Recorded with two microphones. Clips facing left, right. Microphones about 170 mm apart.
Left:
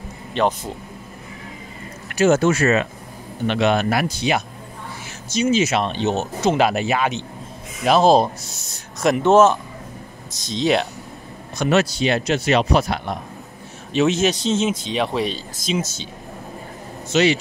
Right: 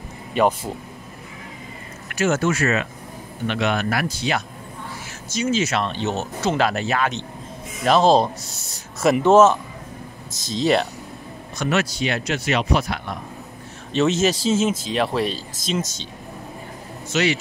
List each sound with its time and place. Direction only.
0.3 s speech: 10° right (ahead or behind)
2.1 s speech: 25° left (ahead or behind); by 8.3 s 10° left (ahead or behind)
9.0 s speech: 5° right (ahead or behind)
11.6 s speech: 25° left (ahead or behind)
13.9 s speech: centre (ahead or behind)
17.1 s speech: 25° left (ahead or behind)